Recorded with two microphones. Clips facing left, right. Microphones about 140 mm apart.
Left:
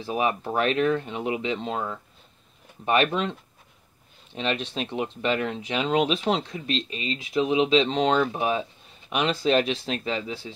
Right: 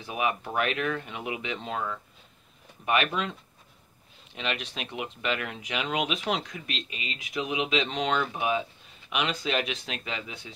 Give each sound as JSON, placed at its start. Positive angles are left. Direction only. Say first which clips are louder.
{"t": 0.0, "sound": "speech", "louder": "left 4 dB", "side_deg": 30}
{"t": 4.4, "sound": "speech", "louder": "left 6 dB", "side_deg": 35}